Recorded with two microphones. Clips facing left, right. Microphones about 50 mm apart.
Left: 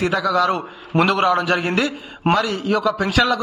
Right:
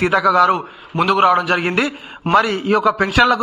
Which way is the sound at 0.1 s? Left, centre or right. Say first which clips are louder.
Right 5 dB; right.